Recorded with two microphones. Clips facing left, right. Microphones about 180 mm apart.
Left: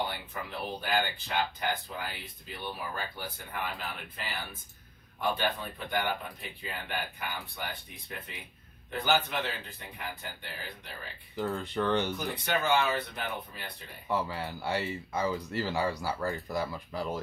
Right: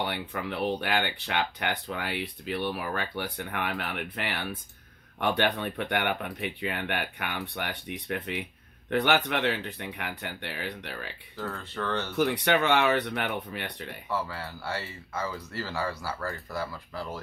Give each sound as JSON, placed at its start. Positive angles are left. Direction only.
{"t": 0.0, "sound": "speech", "side_deg": -70}
{"t": 11.3, "sound": "speech", "side_deg": 15}
{"t": 12.2, "sound": "speech", "side_deg": -70}
{"t": 14.1, "sound": "speech", "side_deg": 15}